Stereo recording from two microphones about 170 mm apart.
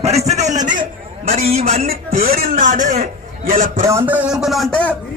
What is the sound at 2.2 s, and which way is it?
A man's voice, 55° right (ahead or behind).